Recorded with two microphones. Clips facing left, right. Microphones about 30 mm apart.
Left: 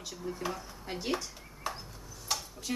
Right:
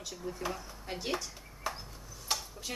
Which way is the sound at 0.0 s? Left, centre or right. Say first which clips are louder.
Left 1 dB; centre.